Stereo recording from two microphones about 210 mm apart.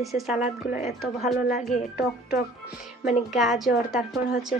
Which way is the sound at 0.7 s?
40° left (ahead or behind).